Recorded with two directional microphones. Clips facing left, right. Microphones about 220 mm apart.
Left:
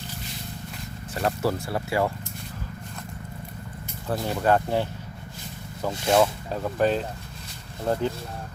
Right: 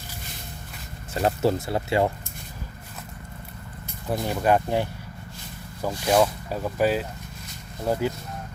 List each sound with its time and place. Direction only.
1.1 s speech: 25° right (ahead or behind)
4.1 s speech: 10° right (ahead or behind)
6.1 s speech: 5° right (ahead or behind)